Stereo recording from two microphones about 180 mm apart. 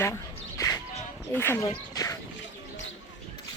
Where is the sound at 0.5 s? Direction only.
20° left (ahead or behind).